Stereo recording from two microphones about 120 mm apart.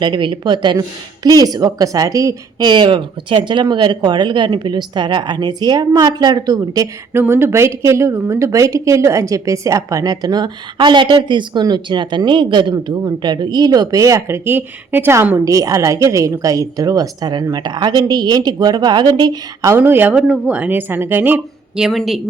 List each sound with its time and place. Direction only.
0.0 s speech: 40° right (ahead or behind)
7.1 s speech: 20° right (ahead or behind)
19.7 s speech: 15° right (ahead or behind)
21.8 s a woman's voice: 5° right (ahead or behind)